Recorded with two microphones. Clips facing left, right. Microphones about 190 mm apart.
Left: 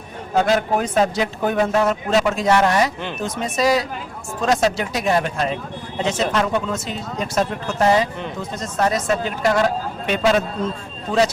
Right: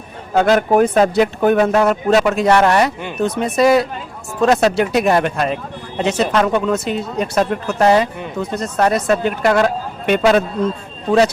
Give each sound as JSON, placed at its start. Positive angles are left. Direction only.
{"t": 0.3, "sound": "a man's voice", "side_deg": -55}